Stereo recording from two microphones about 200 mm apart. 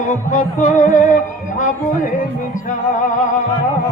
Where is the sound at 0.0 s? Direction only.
40° left (ahead or behind).